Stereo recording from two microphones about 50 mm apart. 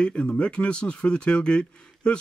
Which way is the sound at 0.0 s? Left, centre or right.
Centre.